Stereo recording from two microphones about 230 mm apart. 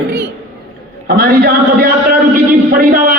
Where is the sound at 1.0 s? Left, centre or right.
Right.